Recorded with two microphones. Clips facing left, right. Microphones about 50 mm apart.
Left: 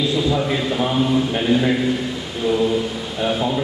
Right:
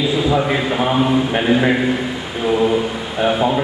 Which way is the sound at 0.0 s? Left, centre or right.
Centre.